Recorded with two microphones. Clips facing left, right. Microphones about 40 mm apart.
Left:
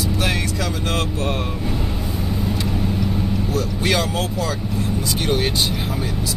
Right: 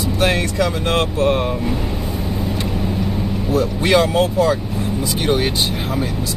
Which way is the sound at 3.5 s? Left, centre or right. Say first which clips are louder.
Right 8 dB; right.